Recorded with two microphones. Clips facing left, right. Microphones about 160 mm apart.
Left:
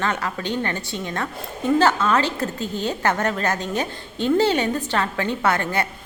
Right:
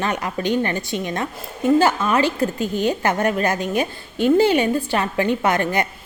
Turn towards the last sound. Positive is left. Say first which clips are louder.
# right 2 dB
turn(degrees=-15)  # may be behind; listen again after turning